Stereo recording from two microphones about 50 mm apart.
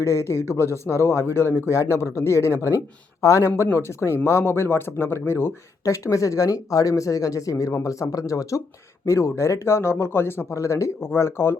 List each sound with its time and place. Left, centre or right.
0.0 s speech: left
1.5 s speech: left
3.7 s speech: left
5.8 s speech: left
9.0 s speech: left
10.5 s speech: left
11.1 s speech: left